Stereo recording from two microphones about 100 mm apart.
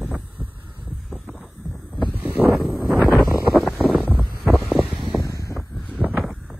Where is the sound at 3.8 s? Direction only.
15° right (ahead or behind).